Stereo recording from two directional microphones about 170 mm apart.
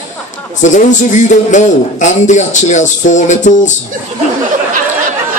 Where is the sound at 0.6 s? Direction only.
45° left (ahead or behind).